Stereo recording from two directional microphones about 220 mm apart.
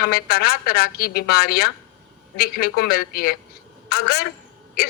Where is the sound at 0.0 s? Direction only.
45° left (ahead or behind).